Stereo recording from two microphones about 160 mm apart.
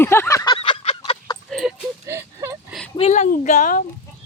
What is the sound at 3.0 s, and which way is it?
Speech, 45° left (ahead or behind).